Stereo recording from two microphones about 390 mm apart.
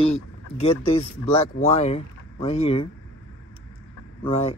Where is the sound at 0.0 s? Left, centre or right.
Centre.